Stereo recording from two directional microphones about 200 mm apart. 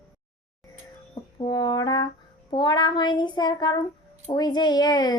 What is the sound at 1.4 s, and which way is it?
Speech, 20° left (ahead or behind).